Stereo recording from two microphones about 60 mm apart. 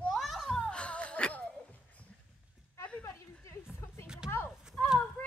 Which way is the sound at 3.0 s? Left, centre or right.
Left.